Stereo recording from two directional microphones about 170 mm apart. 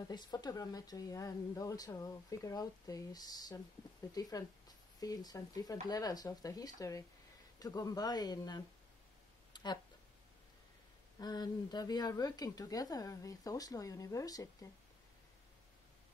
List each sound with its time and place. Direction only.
0.1 s speech: 25° left (ahead or behind)
9.5 s a sound: 25° left (ahead or behind)
11.1 s speech: 25° left (ahead or behind)